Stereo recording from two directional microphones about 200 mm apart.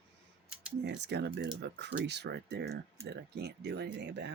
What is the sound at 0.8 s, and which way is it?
Speech, 60° right (ahead or behind).